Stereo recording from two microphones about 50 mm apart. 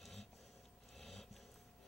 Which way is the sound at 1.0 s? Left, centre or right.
Centre.